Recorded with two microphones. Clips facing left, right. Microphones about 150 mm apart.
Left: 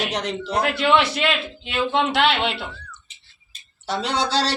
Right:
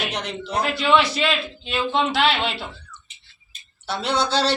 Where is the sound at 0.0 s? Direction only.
40° left (ahead or behind).